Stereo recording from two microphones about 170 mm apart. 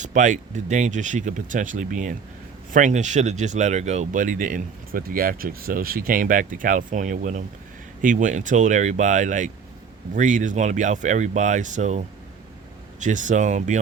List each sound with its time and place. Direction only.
0.0 s speech: 45° right (ahead or behind)